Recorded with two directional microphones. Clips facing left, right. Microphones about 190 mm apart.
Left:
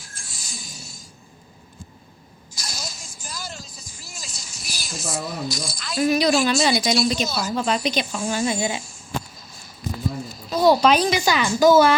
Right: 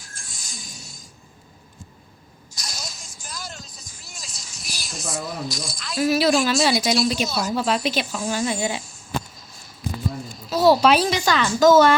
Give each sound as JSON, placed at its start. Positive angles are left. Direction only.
{"t": 0.3, "sound": "a sound", "side_deg": 0}
{"t": 2.6, "sound": "vehicle", "side_deg": 0}
{"t": 8.3, "sound": "speech", "side_deg": 10}
{"t": 10.2, "sound": "a woman's voice", "side_deg": -5}
{"t": 11.1, "sound": "speech", "side_deg": 10}